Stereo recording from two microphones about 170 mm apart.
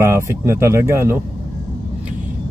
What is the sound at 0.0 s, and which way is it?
Speech, 15° right (ahead or behind).